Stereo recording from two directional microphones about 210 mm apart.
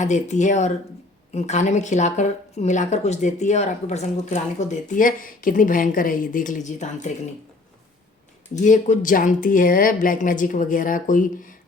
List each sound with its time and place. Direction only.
0.0 s speech: 35° left (ahead or behind)
8.6 s speech: 35° left (ahead or behind)